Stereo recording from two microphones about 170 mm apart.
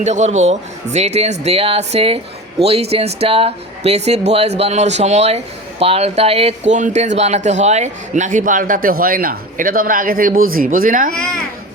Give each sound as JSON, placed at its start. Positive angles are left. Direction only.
{"t": 0.0, "sound": "speech", "side_deg": -45}
{"t": 11.1, "sound": "a child's voice", "side_deg": 5}